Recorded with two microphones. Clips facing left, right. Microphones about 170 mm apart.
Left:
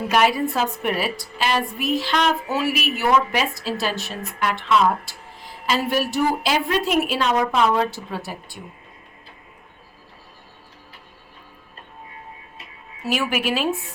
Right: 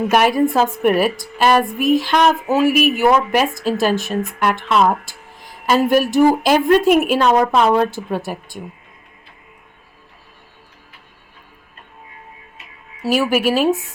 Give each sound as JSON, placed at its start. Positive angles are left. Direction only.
{"t": 0.1, "sound": "a woman's voice", "side_deg": -50}
{"t": 13.0, "sound": "speech", "side_deg": -40}